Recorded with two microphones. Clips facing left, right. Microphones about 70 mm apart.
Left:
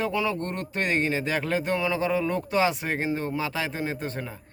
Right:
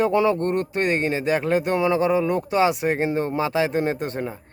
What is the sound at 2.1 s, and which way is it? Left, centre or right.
Speech, centre.